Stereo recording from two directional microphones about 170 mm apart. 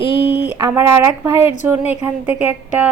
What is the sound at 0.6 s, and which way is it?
A woman's voice, 15° right (ahead or behind).